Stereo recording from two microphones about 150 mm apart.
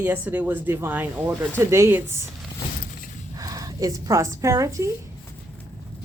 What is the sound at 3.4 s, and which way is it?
Speech, 25° right (ahead or behind).